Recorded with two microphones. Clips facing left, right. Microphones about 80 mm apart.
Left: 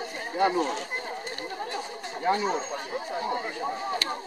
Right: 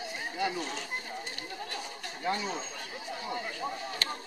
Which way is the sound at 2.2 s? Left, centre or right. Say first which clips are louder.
Left 7 dB; left.